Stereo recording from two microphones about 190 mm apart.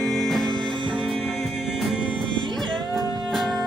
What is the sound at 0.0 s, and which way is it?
Music, centre (ahead or behind).